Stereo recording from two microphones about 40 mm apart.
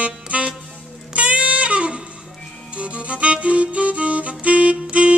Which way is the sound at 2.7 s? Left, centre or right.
Right.